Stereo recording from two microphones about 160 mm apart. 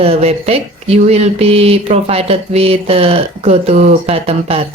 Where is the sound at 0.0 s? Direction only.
40° right (ahead or behind).